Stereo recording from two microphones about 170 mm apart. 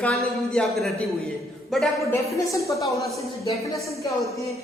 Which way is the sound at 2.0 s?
20° left (ahead or behind).